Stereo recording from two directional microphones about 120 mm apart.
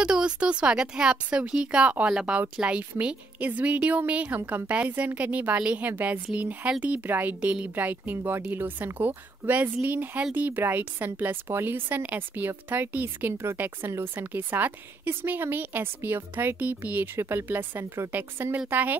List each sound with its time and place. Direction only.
0.0 s a woman's voice: 5° right (ahead or behind)